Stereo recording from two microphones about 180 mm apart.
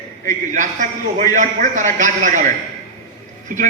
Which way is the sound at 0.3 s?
45° right (ahead or behind).